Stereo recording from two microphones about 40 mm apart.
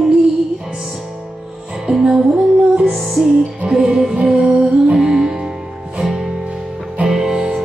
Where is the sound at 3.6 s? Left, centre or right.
Centre.